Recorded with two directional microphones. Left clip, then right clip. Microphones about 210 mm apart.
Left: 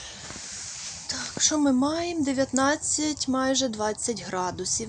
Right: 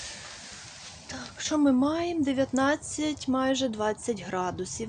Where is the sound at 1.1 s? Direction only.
Centre (ahead or behind).